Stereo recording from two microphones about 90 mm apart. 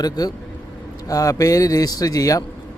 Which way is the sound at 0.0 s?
45° left (ahead or behind).